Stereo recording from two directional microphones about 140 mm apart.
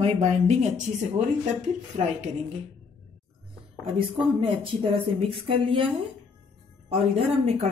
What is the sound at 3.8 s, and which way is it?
Speech, 40° right (ahead or behind).